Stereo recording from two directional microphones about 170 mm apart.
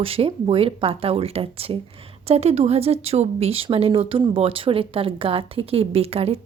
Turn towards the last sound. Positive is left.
turn(degrees=-35)  # may be behind; listen again after turning